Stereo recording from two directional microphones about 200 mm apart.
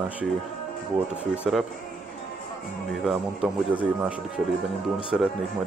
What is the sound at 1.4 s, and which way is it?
Speech, centre (ahead or behind).